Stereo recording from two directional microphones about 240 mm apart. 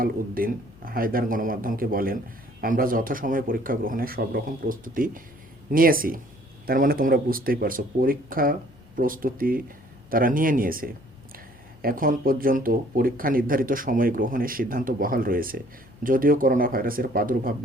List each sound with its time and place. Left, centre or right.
0.0 s speech: right